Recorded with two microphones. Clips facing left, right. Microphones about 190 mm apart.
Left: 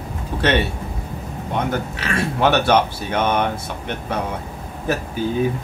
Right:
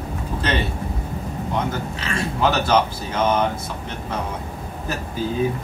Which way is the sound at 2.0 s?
65° left (ahead or behind).